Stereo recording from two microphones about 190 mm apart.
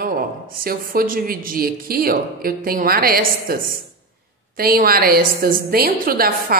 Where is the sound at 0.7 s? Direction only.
50° right (ahead or behind).